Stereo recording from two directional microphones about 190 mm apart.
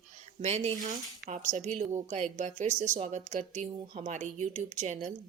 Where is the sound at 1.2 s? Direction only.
55° right (ahead or behind).